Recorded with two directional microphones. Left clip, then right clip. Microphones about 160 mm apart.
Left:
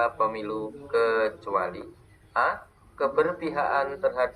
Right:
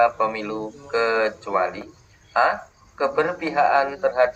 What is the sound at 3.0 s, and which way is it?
Speech, 25° right (ahead or behind).